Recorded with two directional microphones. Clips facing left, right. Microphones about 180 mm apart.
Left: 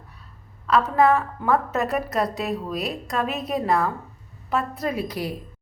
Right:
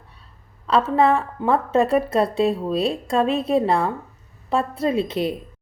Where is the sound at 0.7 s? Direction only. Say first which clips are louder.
Right 1 dB; 30° right (ahead or behind).